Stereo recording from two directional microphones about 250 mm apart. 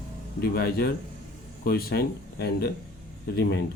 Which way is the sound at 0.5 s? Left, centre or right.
Left.